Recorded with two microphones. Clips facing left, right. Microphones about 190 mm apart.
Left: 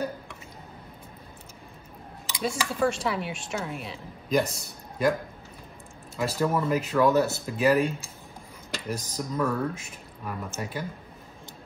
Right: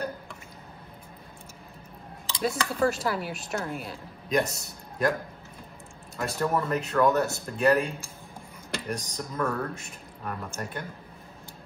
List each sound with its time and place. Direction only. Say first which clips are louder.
2.4 s speech: even; centre (ahead or behind)
6.1 s speech: left 1 dB; centre (ahead or behind)
8.9 s speech: left 5 dB; centre (ahead or behind)